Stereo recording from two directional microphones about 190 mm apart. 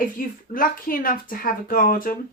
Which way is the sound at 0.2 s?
45° left (ahead or behind).